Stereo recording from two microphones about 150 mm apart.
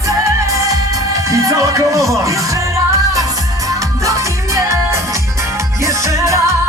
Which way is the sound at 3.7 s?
20° right (ahead or behind).